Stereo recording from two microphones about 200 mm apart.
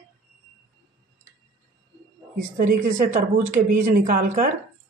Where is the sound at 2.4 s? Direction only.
40° right (ahead or behind).